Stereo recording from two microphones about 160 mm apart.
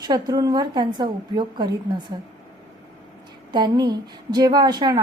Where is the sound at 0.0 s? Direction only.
25° right (ahead or behind).